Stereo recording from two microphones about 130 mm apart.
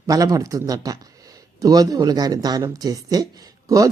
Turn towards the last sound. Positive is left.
turn(degrees=-25)  # may be behind; listen again after turning